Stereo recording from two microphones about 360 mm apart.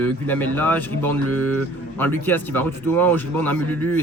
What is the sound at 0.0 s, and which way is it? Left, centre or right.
Speech, centre.